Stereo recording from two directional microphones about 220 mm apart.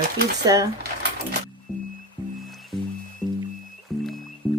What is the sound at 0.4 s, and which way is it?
Speech, 15° right (ahead or behind).